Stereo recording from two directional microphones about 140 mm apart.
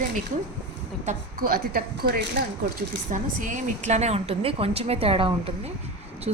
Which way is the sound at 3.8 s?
55° right (ahead or behind).